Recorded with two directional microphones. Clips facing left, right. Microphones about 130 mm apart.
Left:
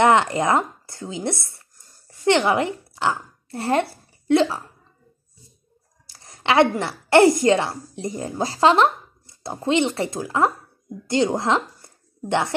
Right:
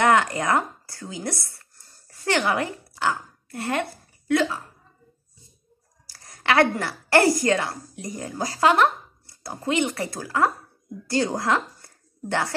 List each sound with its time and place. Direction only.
0.0 s speech: 25° left (ahead or behind)
6.0 s a woman's voice: 25° left (ahead or behind)